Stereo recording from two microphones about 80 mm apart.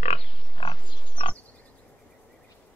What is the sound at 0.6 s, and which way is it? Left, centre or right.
Pig, left.